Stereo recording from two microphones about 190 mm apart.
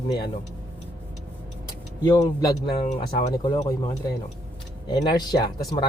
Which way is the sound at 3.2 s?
20° left (ahead or behind).